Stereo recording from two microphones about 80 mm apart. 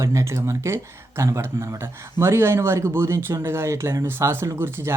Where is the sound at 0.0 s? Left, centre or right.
Right.